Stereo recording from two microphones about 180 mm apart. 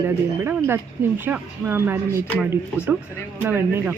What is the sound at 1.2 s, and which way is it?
Speech, 10° right (ahead or behind).